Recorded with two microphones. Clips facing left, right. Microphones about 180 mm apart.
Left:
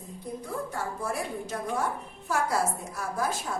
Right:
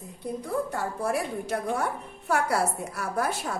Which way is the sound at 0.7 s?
65° right (ahead or behind).